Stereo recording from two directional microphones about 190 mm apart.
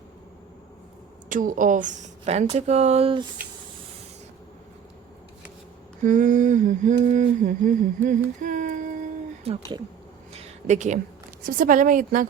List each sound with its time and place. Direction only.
1.3 s speech: 45° right (ahead or behind); by 3.2 s 30° right (ahead or behind)
6.0 s a sound: 45° right (ahead or behind)
11.4 s a woman's voice: 45° right (ahead or behind)